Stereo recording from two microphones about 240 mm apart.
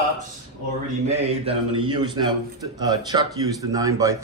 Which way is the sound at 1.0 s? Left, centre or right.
Right.